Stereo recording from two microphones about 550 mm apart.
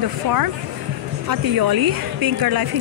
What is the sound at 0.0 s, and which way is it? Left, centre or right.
Speech, right.